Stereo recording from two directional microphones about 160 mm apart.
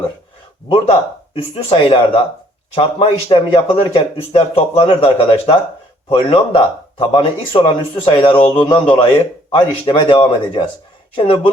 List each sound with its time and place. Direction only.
0.7 s a man's voice: 35° left (ahead or behind)